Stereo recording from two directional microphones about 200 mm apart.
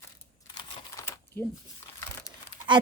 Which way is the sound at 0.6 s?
25° left (ahead or behind).